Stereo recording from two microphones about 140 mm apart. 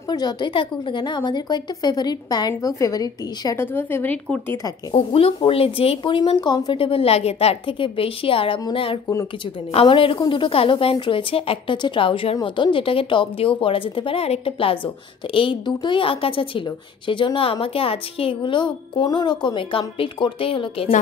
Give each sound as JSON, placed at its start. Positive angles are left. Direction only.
{"t": 0.1, "sound": "a woman's voice", "side_deg": 30}
{"t": 3.6, "sound": "speech", "side_deg": 15}
{"t": 4.9, "sound": "a woman's voice", "side_deg": 45}
{"t": 6.8, "sound": "a woman's voice", "side_deg": 45}